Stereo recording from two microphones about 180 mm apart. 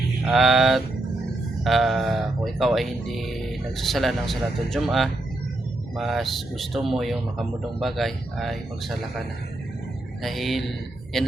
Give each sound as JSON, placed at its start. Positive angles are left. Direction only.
{"t": 0.3, "sound": "speech", "side_deg": 0}
{"t": 10.2, "sound": "speech", "side_deg": 0}